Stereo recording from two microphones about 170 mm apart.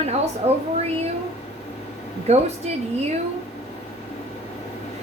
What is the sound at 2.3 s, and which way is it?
Speech, 40° right (ahead or behind).